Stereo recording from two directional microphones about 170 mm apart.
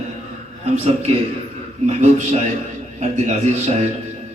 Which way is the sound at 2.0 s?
45° right (ahead or behind).